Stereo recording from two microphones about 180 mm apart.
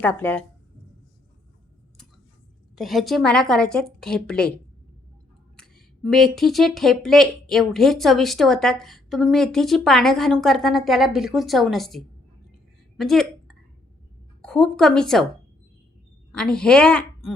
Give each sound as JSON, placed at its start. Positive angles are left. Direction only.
{"t": 0.0, "sound": "a woman's voice", "side_deg": 10}
{"t": 2.7, "sound": "speech", "side_deg": 0}
{"t": 13.0, "sound": "a sound", "side_deg": 0}
{"t": 14.4, "sound": "speech", "side_deg": 5}
{"t": 16.3, "sound": "a woman's voice", "side_deg": 5}